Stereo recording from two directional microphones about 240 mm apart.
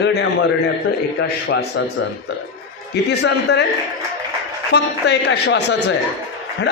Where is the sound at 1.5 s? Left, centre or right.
Left.